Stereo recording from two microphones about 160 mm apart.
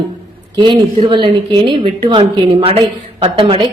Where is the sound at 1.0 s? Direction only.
30° right (ahead or behind).